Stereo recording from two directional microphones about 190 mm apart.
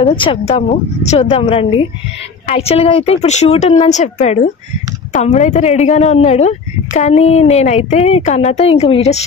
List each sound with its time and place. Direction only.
0.0 s a woman's voice: 30° left (ahead or behind)